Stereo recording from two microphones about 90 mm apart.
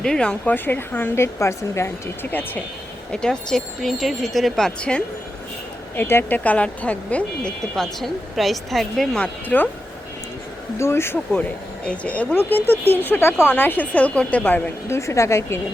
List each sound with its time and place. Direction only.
0.0 s speech: 10° left (ahead or behind)
0.5 s speech: 20° left (ahead or behind)
3.1 s speech: 10° left (ahead or behind)
6.0 s speech: 25° left (ahead or behind); by 9.0 s centre (ahead or behind)
9.1 s speech: 15° left (ahead or behind)
10.8 s speech: 30° left (ahead or behind)
14.8 s a woman's voice: 35° left (ahead or behind)